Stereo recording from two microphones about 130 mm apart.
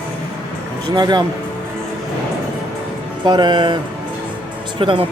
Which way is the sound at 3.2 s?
35° right (ahead or behind).